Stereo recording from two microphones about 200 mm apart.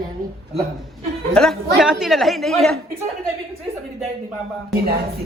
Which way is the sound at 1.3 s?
Centre (ahead or behind).